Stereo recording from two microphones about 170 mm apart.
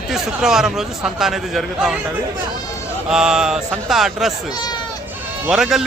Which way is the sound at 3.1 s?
5° right (ahead or behind).